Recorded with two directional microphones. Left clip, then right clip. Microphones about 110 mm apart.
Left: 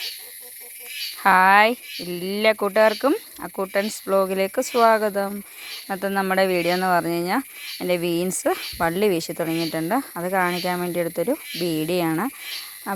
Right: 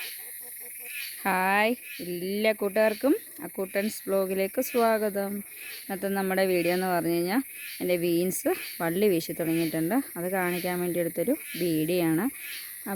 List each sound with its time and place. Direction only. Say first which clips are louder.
1.2 s speech: left 10 dB; 5° right (ahead or behind)